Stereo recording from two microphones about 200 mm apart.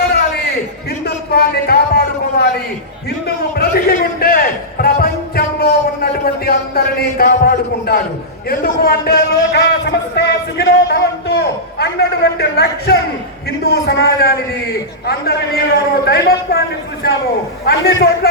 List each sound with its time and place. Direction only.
1.0 s a sound: 50° left (ahead or behind)
3.2 s a man's voice: 50° left (ahead or behind)
17.7 s a man's voice: 50° left (ahead or behind)